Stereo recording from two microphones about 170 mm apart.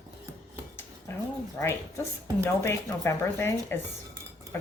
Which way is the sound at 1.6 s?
15° left (ahead or behind).